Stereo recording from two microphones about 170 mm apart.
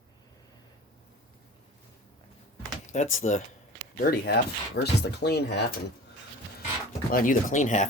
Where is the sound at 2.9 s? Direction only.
45° left (ahead or behind).